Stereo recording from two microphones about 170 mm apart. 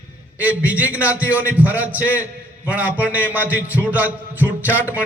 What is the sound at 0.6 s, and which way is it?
A man's voice, 10° right (ahead or behind).